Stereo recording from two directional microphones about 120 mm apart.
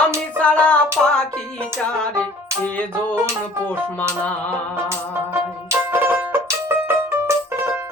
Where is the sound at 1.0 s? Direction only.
10° right (ahead or behind).